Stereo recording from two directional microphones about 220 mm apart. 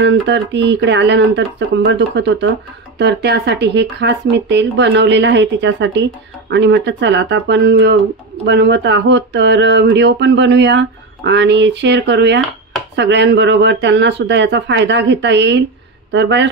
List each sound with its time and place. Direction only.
0.0 s speech: 55° right (ahead or behind)